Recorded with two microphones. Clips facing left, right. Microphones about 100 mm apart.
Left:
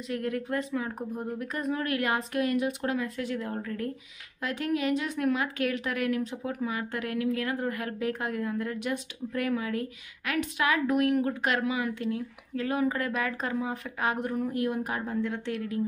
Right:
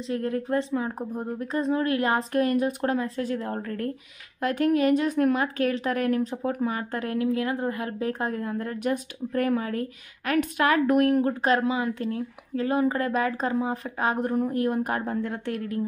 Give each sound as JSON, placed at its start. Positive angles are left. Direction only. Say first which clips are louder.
{"t": 0.0, "sound": "a woman's voice", "louder": "right 4 dB", "side_deg": -30}